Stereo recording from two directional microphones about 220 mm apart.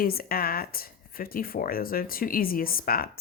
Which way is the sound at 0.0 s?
40° left (ahead or behind).